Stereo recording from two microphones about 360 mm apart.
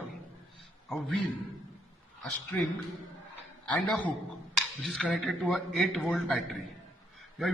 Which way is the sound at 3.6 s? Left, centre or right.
Centre.